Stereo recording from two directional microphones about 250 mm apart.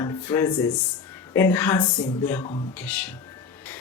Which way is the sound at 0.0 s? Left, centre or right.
Centre.